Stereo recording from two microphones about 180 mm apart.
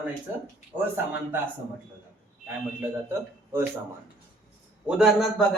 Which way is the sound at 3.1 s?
15° right (ahead or behind).